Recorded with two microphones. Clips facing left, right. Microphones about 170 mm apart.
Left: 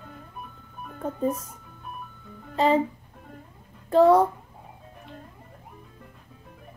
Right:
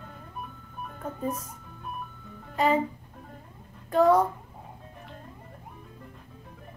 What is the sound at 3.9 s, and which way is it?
Speech, 30° left (ahead or behind).